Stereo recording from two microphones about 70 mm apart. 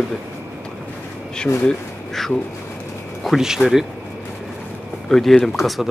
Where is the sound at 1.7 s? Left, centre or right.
Centre.